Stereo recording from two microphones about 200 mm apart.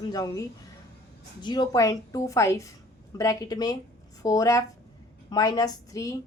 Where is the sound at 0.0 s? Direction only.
20° left (ahead or behind).